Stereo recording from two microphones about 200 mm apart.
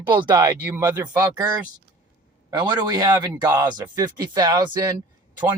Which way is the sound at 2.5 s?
20° right (ahead or behind).